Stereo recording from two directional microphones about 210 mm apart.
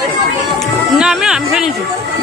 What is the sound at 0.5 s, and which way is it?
Music, 5° right (ahead or behind).